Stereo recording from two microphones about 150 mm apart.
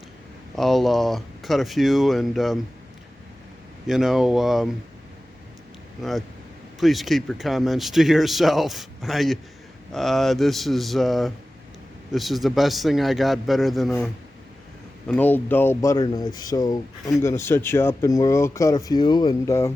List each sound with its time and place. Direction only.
0.5 s speech: centre (ahead or behind)
3.8 s speech: 5° right (ahead or behind)
6.0 s speech: centre (ahead or behind)
15.0 s speech: 10° left (ahead or behind)